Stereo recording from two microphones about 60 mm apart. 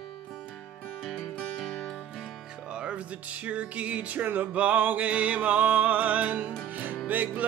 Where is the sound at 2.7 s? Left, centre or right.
Centre.